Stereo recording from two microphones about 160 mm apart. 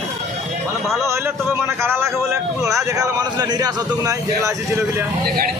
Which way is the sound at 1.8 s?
15° right (ahead or behind).